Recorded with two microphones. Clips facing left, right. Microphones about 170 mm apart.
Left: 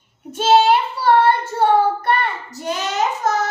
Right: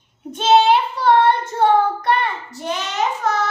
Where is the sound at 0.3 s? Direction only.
5° left (ahead or behind).